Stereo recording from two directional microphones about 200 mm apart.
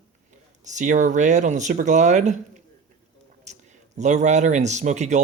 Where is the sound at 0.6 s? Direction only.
35° right (ahead or behind).